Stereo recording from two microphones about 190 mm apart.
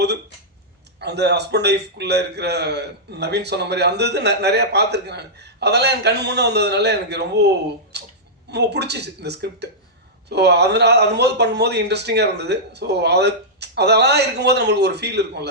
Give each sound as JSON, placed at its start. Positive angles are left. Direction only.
{"t": 0.9, "sound": "a man's voice", "side_deg": -60}